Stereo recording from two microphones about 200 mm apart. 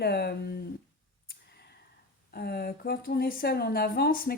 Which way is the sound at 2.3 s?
50° left (ahead or behind).